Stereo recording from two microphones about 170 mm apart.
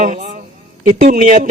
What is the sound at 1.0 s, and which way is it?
Music, 50° right (ahead or behind).